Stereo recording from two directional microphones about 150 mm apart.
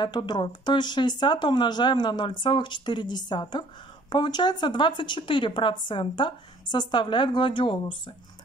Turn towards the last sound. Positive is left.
turn(degrees=35)  # may be behind; listen again after turning